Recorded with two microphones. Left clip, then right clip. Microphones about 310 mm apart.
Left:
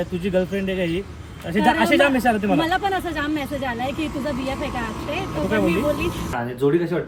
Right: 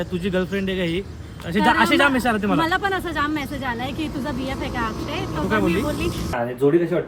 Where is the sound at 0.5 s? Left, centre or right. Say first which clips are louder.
Even; right.